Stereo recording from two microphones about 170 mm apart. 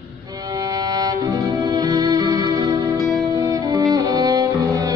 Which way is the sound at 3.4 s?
20° right (ahead or behind).